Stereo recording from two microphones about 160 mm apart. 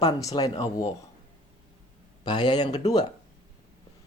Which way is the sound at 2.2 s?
25° left (ahead or behind).